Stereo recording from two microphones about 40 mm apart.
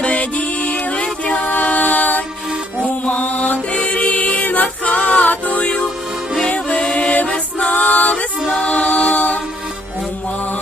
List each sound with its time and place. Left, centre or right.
0.0 s music: left
8.4 s music: left